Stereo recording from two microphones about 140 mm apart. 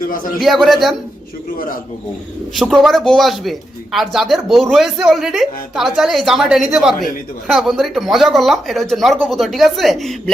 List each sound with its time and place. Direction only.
0.0 s a man's voice: 80° left
0.4 s speech: centre (ahead or behind)
1.5 s a man's voice: 90° left
2.6 s speech: centre (ahead or behind)